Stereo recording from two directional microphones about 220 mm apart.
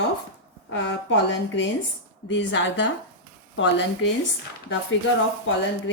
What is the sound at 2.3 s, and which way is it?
Speech, 55° left (ahead or behind).